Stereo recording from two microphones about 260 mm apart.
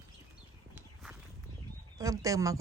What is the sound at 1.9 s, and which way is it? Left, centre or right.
Bird, centre.